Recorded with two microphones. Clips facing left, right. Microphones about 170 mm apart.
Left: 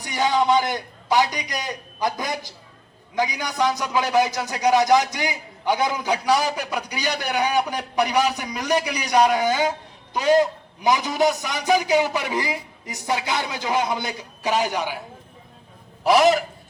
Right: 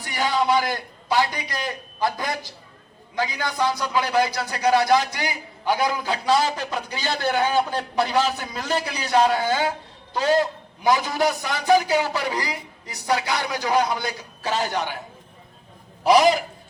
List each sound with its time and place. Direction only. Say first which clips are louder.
0.0 s a man's voice: left 2 dB; 20° left (ahead or behind)
16.0 s a man's voice: even; centre (ahead or behind)